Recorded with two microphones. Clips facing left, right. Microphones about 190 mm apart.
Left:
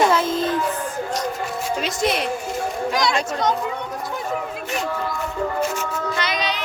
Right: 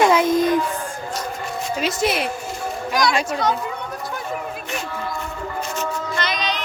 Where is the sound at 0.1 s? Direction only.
15° right (ahead or behind).